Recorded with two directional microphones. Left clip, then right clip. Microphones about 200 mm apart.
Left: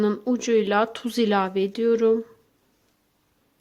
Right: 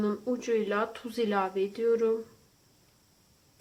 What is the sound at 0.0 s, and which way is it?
Speech, 50° left (ahead or behind).